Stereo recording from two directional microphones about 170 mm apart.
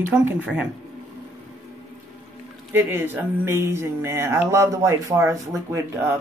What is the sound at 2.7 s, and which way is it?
Speech, 15° right (ahead or behind).